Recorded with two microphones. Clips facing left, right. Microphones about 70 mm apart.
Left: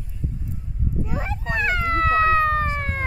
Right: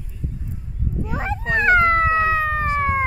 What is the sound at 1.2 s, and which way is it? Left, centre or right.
Dog, right.